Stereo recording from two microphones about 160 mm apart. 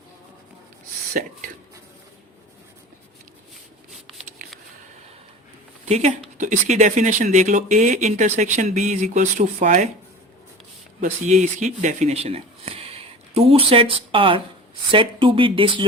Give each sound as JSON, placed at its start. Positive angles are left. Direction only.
{"t": 1.2, "sound": "speech", "side_deg": -60}
{"t": 5.8, "sound": "speech", "side_deg": -45}
{"t": 11.0, "sound": "speech", "side_deg": -50}